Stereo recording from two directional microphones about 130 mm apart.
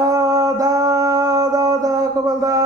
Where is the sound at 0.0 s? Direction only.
25° right (ahead or behind).